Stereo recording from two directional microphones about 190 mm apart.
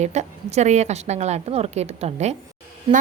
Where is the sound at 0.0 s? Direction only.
35° right (ahead or behind).